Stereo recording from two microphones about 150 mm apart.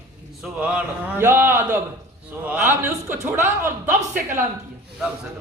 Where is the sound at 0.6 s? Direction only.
10° right (ahead or behind).